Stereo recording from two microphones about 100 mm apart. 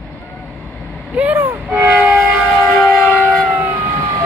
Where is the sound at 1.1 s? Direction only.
15° right (ahead or behind).